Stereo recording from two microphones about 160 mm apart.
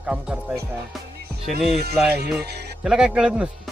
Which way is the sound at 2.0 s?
90° right.